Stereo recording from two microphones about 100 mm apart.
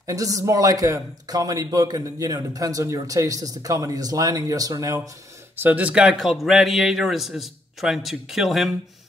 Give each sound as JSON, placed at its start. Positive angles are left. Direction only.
{"t": 0.0, "sound": "a man's voice", "side_deg": -35}
{"t": 5.6, "sound": "speech", "side_deg": -15}